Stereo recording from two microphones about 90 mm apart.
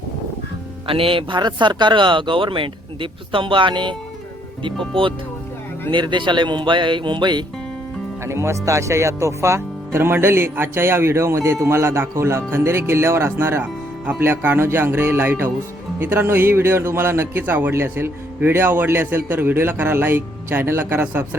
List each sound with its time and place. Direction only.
0.9 s speech: 90° right
1.4 s speech: 55° right (ahead or behind)
4.9 s speech: 75° right (ahead or behind)
5.9 s speech: 60° right (ahead or behind)
8.2 s speech: 30° right (ahead or behind)